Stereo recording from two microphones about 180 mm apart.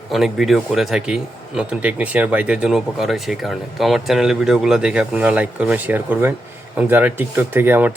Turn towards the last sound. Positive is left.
turn(degrees=-10)  # may be behind; listen again after turning